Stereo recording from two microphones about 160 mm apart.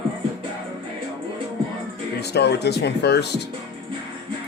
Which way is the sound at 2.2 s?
90° left.